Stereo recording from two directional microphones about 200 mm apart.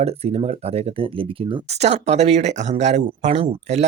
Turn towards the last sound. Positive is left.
turn(degrees=-35)  # may be behind; listen again after turning